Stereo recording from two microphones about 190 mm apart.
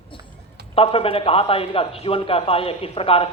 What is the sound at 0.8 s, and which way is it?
Speech, 30° left (ahead or behind).